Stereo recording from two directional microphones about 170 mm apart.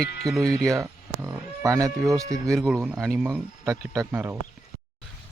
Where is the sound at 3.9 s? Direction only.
15° right (ahead or behind).